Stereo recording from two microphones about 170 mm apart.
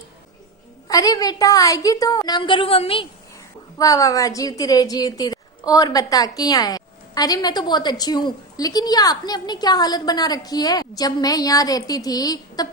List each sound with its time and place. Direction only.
0.9 s a woman's voice: 20° left (ahead or behind)
3.8 s a woman's voice: 20° left (ahead or behind)